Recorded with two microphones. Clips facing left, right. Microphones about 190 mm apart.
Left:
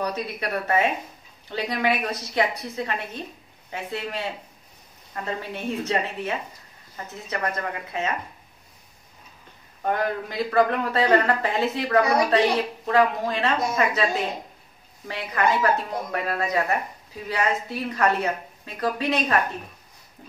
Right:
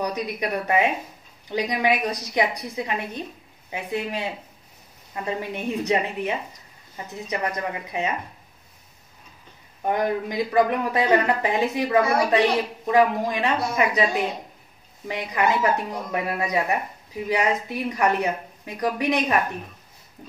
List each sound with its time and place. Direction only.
0.0 s a woman's voice: 15° right (ahead or behind)
9.8 s a woman's voice: 15° right (ahead or behind)
15.0 s a woman's voice: 15° right (ahead or behind)